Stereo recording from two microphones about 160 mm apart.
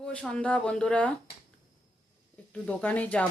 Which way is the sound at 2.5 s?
10° left (ahead or behind).